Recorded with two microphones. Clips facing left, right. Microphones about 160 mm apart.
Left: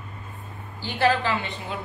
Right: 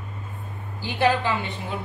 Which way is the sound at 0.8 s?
15° right (ahead or behind).